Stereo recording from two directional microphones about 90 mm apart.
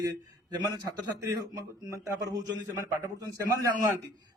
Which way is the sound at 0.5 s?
45° right (ahead or behind).